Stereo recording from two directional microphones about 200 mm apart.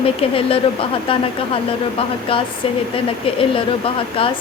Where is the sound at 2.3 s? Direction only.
25° left (ahead or behind).